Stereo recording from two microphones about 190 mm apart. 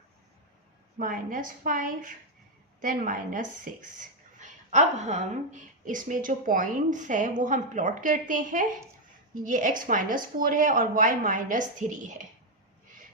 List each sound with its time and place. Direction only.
0.9 s a woman's voice: 45° right (ahead or behind)